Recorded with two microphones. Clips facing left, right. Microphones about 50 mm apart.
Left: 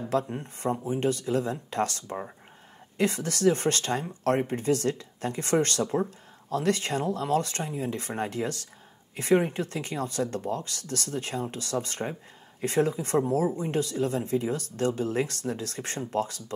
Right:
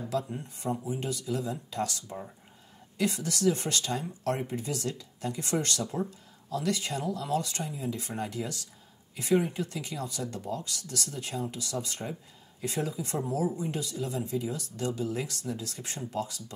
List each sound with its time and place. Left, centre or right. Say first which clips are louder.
0.1 s speech: left 5 dB; left